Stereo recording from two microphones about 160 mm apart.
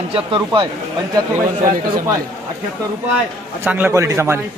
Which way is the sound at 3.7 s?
10° right (ahead or behind).